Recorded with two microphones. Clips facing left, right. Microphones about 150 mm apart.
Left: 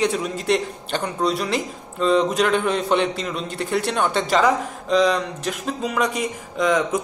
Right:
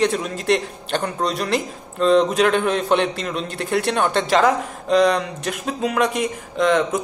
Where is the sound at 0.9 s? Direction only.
5° left (ahead or behind).